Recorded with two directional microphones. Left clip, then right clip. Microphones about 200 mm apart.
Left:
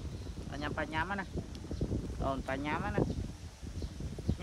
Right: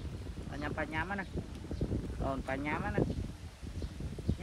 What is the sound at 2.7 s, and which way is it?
Speech, 40° left (ahead or behind).